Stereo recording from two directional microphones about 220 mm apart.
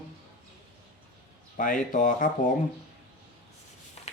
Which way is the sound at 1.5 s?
35° left (ahead or behind).